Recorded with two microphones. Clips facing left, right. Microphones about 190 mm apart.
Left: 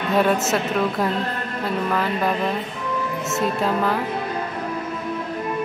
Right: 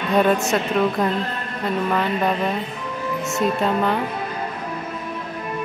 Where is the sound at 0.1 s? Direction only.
5° left (ahead or behind).